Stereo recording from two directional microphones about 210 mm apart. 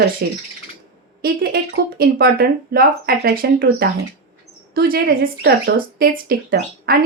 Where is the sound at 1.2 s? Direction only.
50° right (ahead or behind).